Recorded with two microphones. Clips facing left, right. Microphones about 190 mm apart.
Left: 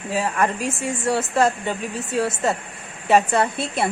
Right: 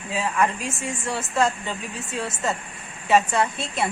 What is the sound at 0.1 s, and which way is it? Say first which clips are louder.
Speech: left 2 dB; 40° left (ahead or behind).